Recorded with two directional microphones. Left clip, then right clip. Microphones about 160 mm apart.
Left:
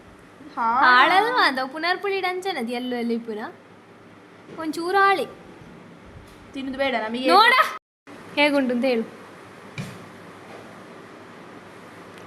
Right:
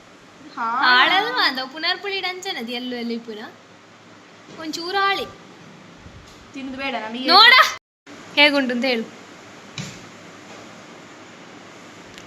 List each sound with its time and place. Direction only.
0.8 s a woman's voice: 30° left (ahead or behind)
4.6 s a woman's voice: 35° left (ahead or behind)
6.7 s a woman's voice: 55° left (ahead or behind)
7.3 s a woman's voice: 20° left (ahead or behind)